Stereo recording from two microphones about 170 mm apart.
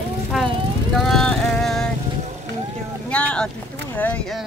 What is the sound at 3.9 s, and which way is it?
Speech, 10° left (ahead or behind).